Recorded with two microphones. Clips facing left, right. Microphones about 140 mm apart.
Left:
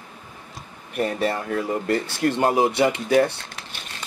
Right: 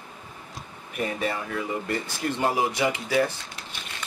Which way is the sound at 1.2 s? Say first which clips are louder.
Left 5 dB; 30° left (ahead or behind).